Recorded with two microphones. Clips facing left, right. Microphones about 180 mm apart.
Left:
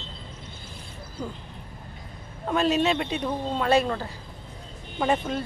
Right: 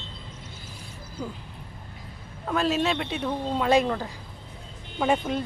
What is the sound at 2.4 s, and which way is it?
Speech, centre (ahead or behind).